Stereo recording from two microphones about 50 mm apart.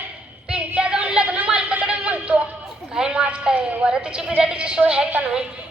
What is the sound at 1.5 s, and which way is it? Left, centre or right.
Music, right.